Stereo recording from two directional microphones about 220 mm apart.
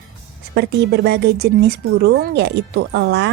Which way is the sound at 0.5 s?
50° right (ahead or behind).